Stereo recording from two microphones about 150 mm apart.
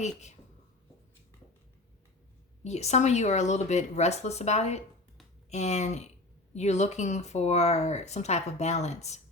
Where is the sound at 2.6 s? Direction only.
45° left (ahead or behind).